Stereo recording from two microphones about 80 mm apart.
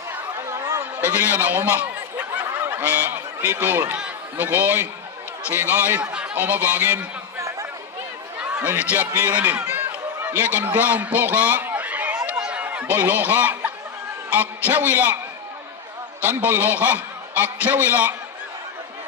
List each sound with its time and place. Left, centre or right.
0.5 s a sound: right
1.0 s fowl: centre
2.6 s honk: right
5.5 s a man's voice: right
8.4 s a sound: centre
12.6 s a man's voice: centre
16.2 s a man's voice: right